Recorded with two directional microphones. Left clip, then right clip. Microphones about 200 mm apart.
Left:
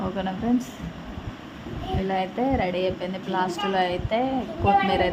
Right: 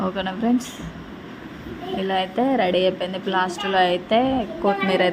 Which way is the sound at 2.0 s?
15° right (ahead or behind).